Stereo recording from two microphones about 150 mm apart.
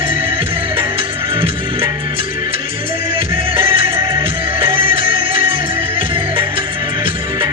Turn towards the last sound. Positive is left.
turn(degrees=-35)  # may be behind; listen again after turning